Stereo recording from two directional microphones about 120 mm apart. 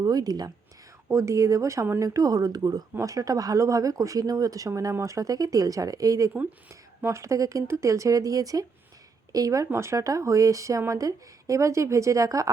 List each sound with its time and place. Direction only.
0.0 s speech: 30° right (ahead or behind)